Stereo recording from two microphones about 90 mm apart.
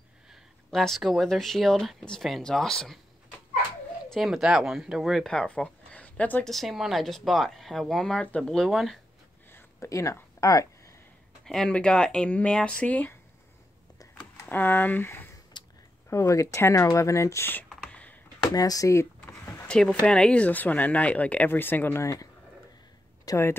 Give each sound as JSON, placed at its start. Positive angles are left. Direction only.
{"t": 0.7, "sound": "speech", "side_deg": 5}
{"t": 5.3, "sound": "speech", "side_deg": 10}
{"t": 6.4, "sound": "speech", "side_deg": 0}
{"t": 9.5, "sound": "a sound", "side_deg": 25}
{"t": 9.8, "sound": "speech", "side_deg": 35}
{"t": 11.4, "sound": "speech", "side_deg": 5}
{"t": 14.4, "sound": "speech", "side_deg": 20}
{"t": 15.5, "sound": "a sound", "side_deg": 55}
{"t": 16.1, "sound": "speech", "side_deg": 35}
{"t": 17.8, "sound": "a sound", "side_deg": 15}
{"t": 18.4, "sound": "a sound", "side_deg": 45}
{"t": 19.7, "sound": "speech", "side_deg": 10}
{"t": 22.0, "sound": "speech", "side_deg": 35}